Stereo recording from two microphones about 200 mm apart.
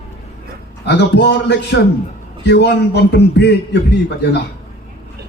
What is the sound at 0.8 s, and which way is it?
Speech, 60° left (ahead or behind).